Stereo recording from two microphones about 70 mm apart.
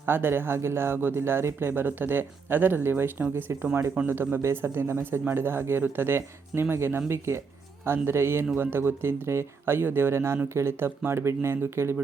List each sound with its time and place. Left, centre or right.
0.0 s speech: right